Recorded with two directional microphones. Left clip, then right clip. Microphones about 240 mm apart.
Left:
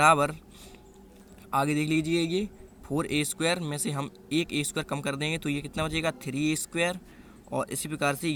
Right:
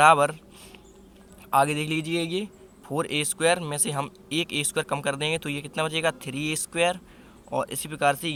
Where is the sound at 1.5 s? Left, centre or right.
Centre.